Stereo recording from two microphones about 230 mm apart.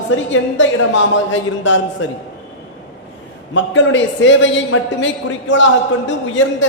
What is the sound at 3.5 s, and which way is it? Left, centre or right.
A woman's voice, left.